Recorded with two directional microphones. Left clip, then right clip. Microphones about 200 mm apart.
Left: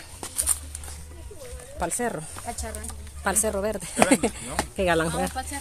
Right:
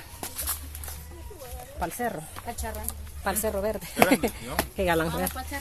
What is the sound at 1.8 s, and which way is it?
Speech, 60° left (ahead or behind).